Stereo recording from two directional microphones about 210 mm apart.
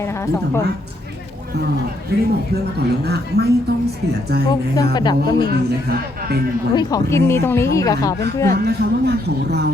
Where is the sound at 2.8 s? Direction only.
50° right (ahead or behind).